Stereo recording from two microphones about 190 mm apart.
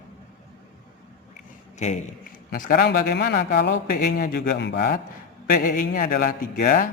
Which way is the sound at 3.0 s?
55° left (ahead or behind).